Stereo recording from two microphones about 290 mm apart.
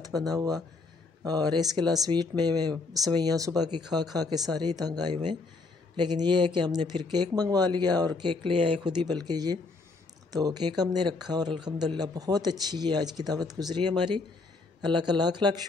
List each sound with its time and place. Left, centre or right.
0.1 s speech: centre